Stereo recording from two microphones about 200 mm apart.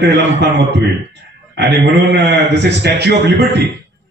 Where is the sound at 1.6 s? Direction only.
60° right (ahead or behind).